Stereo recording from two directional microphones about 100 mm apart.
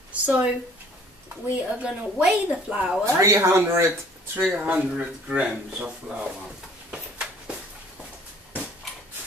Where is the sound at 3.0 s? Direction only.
30° right (ahead or behind).